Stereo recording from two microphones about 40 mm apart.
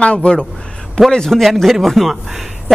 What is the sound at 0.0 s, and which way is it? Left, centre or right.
A man's voice, left.